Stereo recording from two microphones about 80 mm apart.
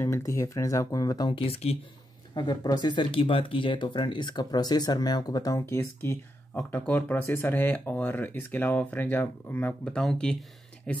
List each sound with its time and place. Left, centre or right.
0.0 s speech: left
2.3 s speech: left
5.6 s speech: left
6.5 s speech: left
9.8 s speech: centre